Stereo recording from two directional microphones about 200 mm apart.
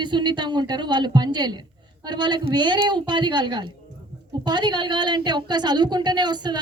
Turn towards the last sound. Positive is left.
turn(degrees=-20)  # may be behind; listen again after turning